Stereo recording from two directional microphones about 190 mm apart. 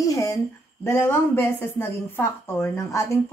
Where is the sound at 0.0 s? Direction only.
15° left (ahead or behind).